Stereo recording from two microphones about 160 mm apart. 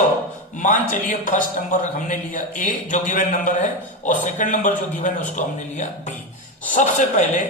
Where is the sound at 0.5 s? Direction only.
55° left (ahead or behind).